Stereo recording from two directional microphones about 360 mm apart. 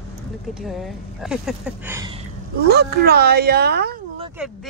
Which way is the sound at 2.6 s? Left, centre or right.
Right.